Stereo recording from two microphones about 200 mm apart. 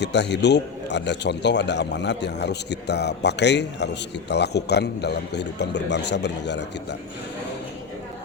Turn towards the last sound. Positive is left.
turn(degrees=60)  # may be behind; listen again after turning